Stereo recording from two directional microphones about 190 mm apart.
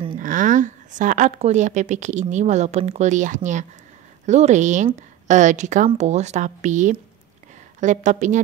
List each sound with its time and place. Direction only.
0.2 s speech: 40° right (ahead or behind)